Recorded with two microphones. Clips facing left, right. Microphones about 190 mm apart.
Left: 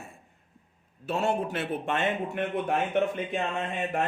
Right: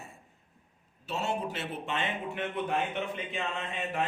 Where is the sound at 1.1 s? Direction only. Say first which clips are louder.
Left 5 dB; 55° left (ahead or behind).